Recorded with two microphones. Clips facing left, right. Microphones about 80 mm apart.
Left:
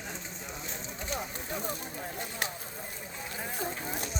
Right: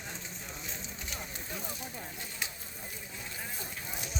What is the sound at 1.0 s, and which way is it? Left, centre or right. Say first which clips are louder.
Run: left 9 dB; left.